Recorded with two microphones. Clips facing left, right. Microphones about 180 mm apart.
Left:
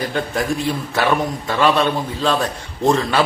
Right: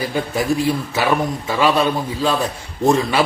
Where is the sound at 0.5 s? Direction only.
5° right (ahead or behind).